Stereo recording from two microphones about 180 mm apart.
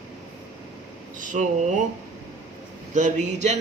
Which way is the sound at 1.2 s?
45° right (ahead or behind).